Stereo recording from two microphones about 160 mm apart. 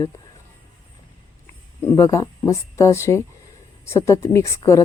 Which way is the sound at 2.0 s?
20° left (ahead or behind).